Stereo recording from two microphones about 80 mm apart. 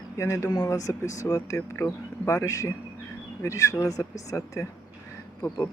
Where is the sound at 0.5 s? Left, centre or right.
Left.